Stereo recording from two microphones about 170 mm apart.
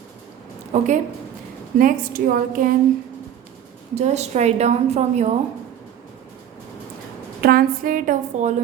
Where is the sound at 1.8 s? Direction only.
55° right (ahead or behind).